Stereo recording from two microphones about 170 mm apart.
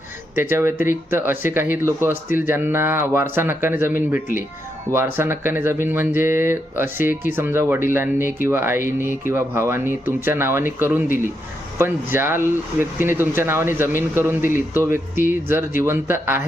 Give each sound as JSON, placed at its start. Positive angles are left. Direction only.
{"t": 0.3, "sound": "speech", "side_deg": -15}